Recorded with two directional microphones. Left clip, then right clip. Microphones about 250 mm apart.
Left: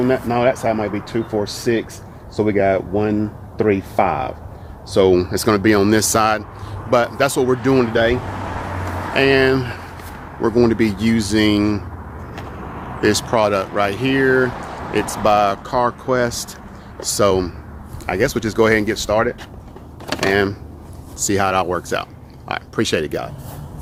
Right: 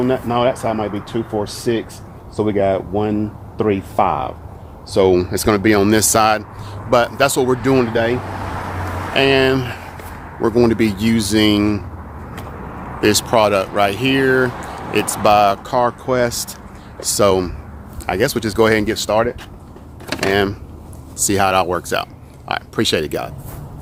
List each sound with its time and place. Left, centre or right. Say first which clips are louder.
0.0 s speech: even; centre
13.0 s speech: right 2 dB; centre
20.1 s power windows: even; centre
20.3 s speech: right 1 dB; centre